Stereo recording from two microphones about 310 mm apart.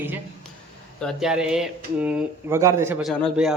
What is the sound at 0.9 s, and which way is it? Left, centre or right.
Speech, centre.